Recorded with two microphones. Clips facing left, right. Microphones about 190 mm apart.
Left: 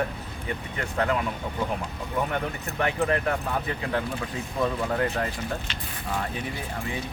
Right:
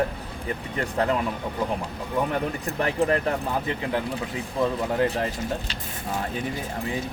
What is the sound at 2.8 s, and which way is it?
Speech, 30° right (ahead or behind).